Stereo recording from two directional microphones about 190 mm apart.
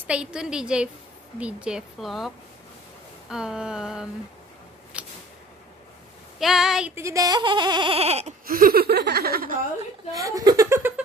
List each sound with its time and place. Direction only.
0.0 s speech: 5° right (ahead or behind)
4.9 s a sound: 5° right (ahead or behind)
6.4 s speech: centre (ahead or behind)
7.0 s speech: 15° right (ahead or behind); by 8.4 s 35° right (ahead or behind)
8.5 s laughter: 50° right (ahead or behind)
10.1 s speech: 15° right (ahead or behind)